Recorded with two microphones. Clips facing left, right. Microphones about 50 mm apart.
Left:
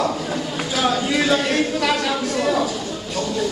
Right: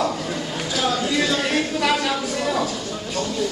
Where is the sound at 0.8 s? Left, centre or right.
Centre.